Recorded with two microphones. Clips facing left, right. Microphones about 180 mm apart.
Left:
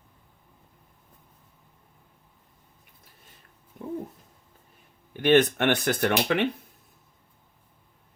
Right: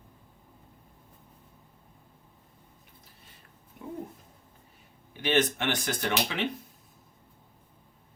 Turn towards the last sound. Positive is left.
turn(degrees=60)  # may be behind; listen again after turning